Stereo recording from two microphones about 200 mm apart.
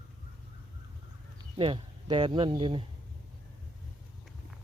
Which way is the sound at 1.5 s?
25° right (ahead or behind).